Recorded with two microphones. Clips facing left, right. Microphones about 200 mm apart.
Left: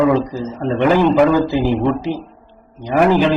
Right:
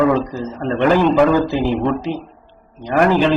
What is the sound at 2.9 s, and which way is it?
Speech, 15° left (ahead or behind).